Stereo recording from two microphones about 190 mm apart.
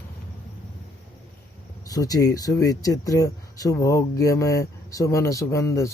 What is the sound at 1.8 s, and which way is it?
Speech, 20° left (ahead or behind).